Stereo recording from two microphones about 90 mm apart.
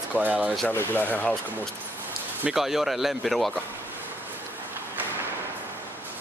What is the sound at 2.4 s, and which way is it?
Speech, 5° right (ahead or behind).